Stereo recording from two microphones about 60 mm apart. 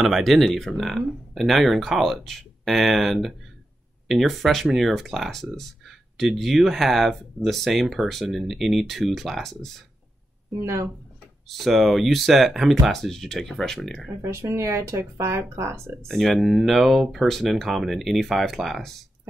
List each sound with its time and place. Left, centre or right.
0.0 s speech: centre
10.6 s speech: right
11.4 s speech: centre
14.2 s speech: right
16.1 s speech: centre